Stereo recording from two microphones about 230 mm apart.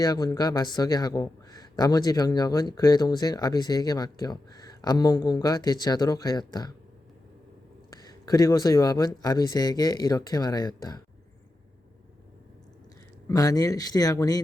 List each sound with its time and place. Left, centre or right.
0.0 s speech: centre
8.3 s speech: centre
13.2 s speech: centre